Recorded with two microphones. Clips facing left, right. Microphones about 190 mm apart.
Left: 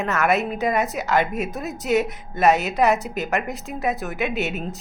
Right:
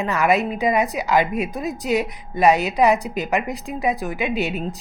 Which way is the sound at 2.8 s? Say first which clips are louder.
Right 2 dB; 5° left (ahead or behind).